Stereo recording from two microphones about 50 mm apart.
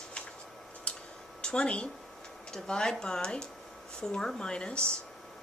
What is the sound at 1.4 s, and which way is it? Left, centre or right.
Speech, centre.